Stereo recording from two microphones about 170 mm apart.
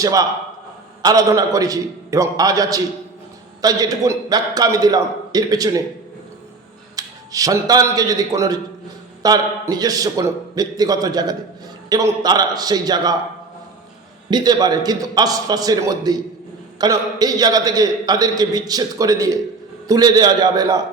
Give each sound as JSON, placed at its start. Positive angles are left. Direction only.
{"t": 0.0, "sound": "a man's voice", "side_deg": -20}
{"t": 6.9, "sound": "a man's voice", "side_deg": -20}
{"t": 14.3, "sound": "a man's voice", "side_deg": -25}